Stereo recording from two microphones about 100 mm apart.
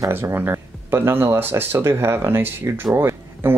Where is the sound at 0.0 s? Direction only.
25° right (ahead or behind).